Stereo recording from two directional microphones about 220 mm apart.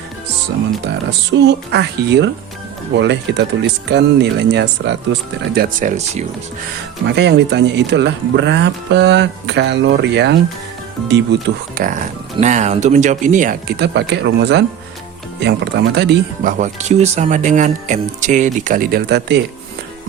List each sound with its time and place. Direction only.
0.9 s speech: 50° right (ahead or behind)
5.5 s speech: 35° right (ahead or behind)
7.1 s speech: 50° right (ahead or behind)